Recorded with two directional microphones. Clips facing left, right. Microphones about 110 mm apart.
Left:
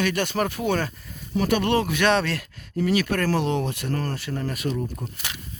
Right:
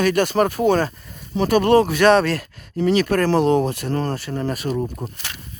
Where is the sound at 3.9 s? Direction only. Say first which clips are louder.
Right 5 dB; 25° right (ahead or behind).